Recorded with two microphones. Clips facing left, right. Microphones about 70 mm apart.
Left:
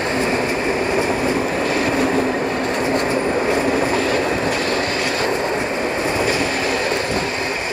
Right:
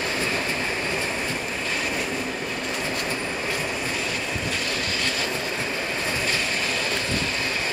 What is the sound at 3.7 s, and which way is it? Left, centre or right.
Train, left.